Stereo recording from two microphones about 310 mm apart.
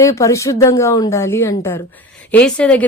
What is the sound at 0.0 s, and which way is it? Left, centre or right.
A woman's voice, centre.